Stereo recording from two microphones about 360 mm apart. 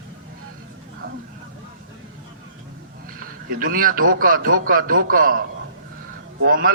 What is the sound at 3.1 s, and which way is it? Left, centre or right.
A man's voice, right.